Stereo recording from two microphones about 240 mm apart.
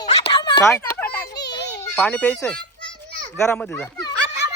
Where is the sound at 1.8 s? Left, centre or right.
Centre.